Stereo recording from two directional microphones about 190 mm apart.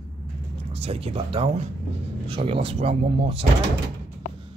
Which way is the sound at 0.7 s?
30° right (ahead or behind).